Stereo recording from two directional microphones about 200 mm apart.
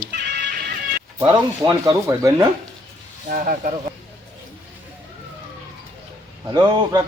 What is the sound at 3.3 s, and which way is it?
Speech, 40° right (ahead or behind).